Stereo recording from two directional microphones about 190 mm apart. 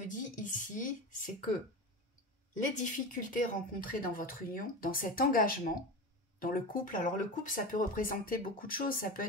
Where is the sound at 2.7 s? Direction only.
45° left (ahead or behind).